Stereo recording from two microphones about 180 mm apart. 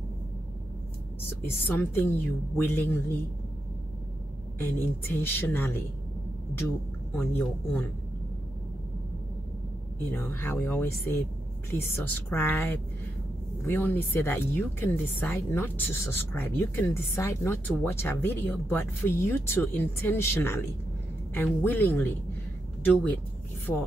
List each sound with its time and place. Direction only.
1.4 s speech: 10° left (ahead or behind)
4.6 s speech: 10° left (ahead or behind)
7.2 s speech: 10° left (ahead or behind)
10.1 s speech: 10° left (ahead or behind)
23.7 s speech: 15° left (ahead or behind)